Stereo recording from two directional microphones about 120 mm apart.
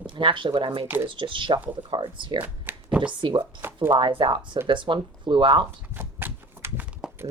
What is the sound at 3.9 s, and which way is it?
Speech, 45° right (ahead or behind).